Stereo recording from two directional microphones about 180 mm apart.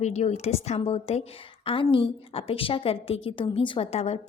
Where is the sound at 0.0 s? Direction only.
40° left (ahead or behind).